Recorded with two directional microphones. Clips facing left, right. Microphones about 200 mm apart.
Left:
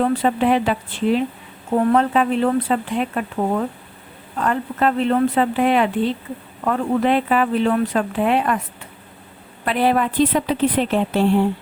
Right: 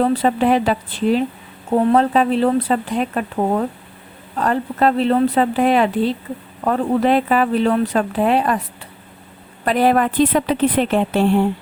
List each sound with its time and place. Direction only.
0.1 s speech: 35° right (ahead or behind)
1.7 s speech: 25° right (ahead or behind)
9.6 s a woman's voice: 45° right (ahead or behind); by 11.0 s 60° right (ahead or behind)